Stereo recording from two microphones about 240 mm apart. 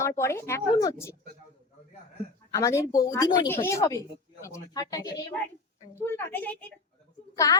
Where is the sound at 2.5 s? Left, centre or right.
Centre.